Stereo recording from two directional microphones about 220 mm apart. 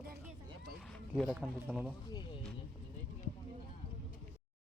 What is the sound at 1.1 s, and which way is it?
Speech, centre (ahead or behind).